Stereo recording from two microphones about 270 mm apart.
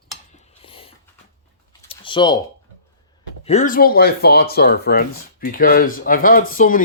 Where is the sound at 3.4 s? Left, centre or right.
Left.